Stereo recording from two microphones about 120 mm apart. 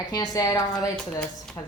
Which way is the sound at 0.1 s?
35° left (ahead or behind).